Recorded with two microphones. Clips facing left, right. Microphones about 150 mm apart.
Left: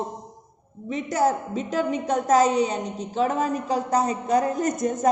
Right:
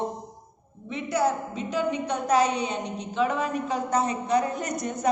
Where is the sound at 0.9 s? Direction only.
40° left (ahead or behind).